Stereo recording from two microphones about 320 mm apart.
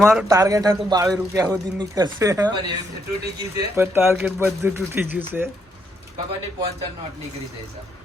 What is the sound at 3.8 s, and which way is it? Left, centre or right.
A man's voice, centre.